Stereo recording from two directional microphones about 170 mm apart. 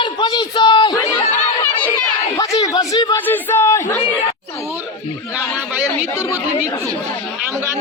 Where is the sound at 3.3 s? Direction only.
10° left (ahead or behind).